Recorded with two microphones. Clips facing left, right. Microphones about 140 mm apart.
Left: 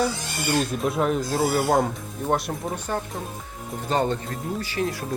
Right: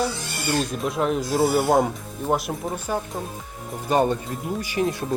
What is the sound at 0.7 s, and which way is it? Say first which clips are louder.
Speech: even; centre (ahead or behind).